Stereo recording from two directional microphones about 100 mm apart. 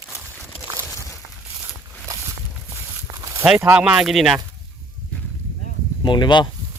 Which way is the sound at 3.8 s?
10° right (ahead or behind).